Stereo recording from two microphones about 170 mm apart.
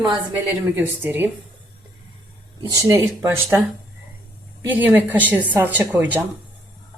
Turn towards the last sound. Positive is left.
turn(degrees=-10)  # may be behind; listen again after turning